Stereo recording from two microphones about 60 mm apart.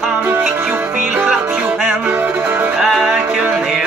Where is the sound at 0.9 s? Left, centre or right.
Right.